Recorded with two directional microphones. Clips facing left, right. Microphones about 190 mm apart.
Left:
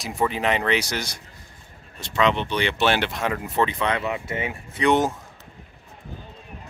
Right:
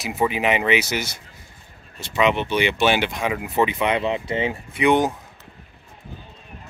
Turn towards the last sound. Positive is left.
turn(degrees=0)  # may be behind; listen again after turning